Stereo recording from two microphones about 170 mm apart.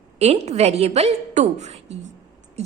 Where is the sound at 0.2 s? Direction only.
40° right (ahead or behind).